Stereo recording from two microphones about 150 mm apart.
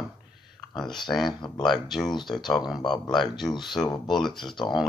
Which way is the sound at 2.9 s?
30° left (ahead or behind).